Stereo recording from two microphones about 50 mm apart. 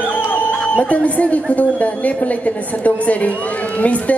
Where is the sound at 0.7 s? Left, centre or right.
Left.